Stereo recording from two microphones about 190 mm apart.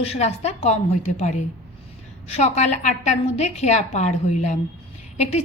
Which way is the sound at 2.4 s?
35° left (ahead or behind).